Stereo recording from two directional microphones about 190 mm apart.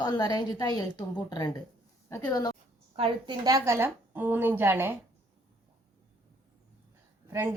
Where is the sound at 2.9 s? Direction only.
25° right (ahead or behind); by 4.9 s 10° right (ahead or behind).